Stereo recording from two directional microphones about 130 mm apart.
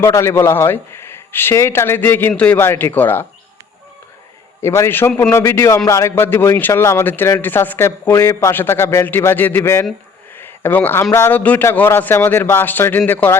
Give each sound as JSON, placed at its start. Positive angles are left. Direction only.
{"t": 0.0, "sound": "a man's voice", "side_deg": 20}
{"t": 4.6, "sound": "a man's voice", "side_deg": 20}
{"t": 10.3, "sound": "a sound", "side_deg": 15}
{"t": 11.1, "sound": "a man's voice", "side_deg": 15}